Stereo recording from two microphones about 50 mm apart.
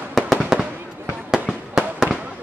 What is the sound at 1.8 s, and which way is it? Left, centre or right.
Fireworks, centre.